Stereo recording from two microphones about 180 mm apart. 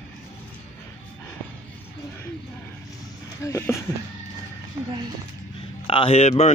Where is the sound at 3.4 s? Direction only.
15° left (ahead or behind).